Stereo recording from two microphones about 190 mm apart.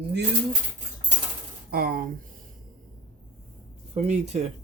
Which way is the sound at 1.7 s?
55° right (ahead or behind).